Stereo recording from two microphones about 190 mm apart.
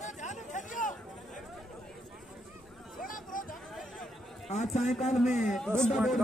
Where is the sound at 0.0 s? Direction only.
40° left (ahead or behind).